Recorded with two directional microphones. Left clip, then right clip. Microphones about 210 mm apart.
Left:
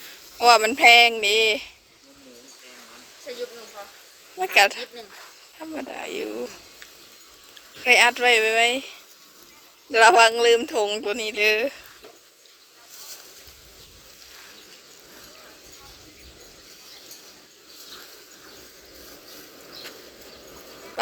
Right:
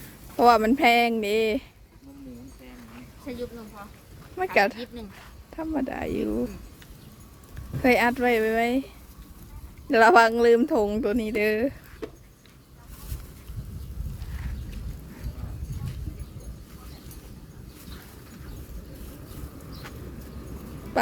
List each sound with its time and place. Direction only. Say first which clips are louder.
0.3 s speech: left 2 dB; 10° right (ahead or behind)
4.4 s speech: left 4 dB; 10° right (ahead or behind)
7.9 s speech: left 4 dB; 15° right (ahead or behind)